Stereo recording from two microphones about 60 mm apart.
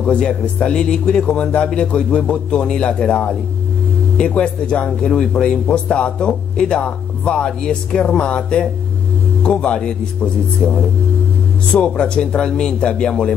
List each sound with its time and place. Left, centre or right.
0.0 s speech: centre